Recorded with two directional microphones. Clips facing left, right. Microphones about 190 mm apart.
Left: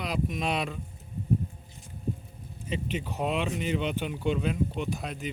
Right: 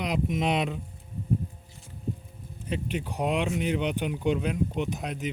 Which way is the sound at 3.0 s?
15° right (ahead or behind).